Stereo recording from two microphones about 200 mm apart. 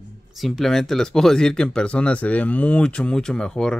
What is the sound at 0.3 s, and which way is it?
Speech, centre (ahead or behind).